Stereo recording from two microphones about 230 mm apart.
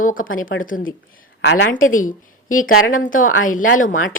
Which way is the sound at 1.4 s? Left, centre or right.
Left.